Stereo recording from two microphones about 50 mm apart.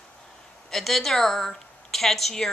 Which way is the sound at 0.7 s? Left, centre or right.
Centre.